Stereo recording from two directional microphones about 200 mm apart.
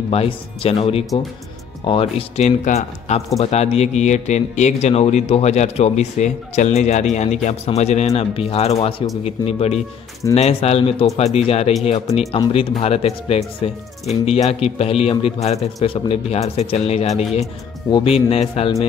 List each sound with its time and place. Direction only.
0.1 s a man's voice: 30° left (ahead or behind)